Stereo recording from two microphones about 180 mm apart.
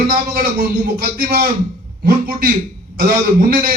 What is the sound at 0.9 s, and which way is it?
A man's voice, 50° right (ahead or behind).